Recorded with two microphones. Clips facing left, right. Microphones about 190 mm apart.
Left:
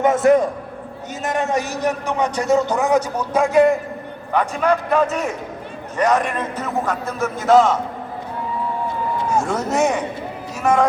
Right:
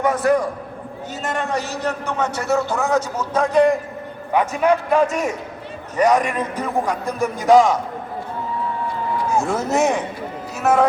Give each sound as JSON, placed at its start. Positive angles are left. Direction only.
{"t": 0.0, "sound": "a man's voice", "side_deg": 20}
{"t": 4.3, "sound": "a man's voice", "side_deg": -10}
{"t": 9.4, "sound": "speech", "side_deg": -5}